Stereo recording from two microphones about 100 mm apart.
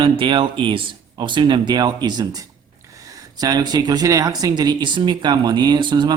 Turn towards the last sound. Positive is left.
turn(degrees=-50)  # may be behind; listen again after turning